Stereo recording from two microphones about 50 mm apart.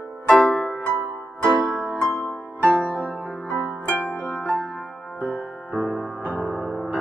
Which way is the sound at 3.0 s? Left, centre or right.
Centre.